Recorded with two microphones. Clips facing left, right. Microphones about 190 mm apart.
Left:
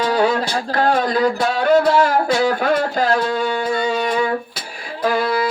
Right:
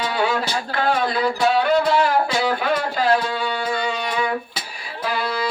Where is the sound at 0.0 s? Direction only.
40° left (ahead or behind).